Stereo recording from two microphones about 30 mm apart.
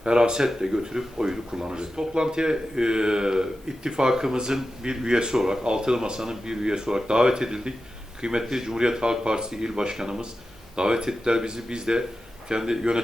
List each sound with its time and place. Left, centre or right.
0.0 s speech: right
8.4 s speech: centre